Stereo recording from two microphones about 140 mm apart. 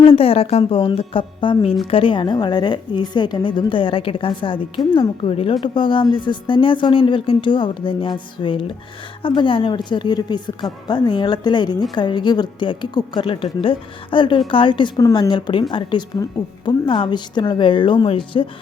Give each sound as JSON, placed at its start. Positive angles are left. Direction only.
{"t": 0.0, "sound": "a woman's voice", "side_deg": 40}